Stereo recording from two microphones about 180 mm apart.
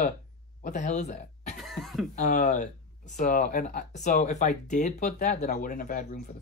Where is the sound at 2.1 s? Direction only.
45° left (ahead or behind).